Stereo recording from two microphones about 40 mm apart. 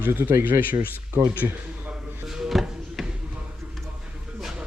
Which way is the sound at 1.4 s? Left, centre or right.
Right.